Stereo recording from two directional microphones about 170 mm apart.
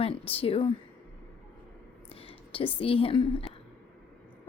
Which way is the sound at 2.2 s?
30° left (ahead or behind).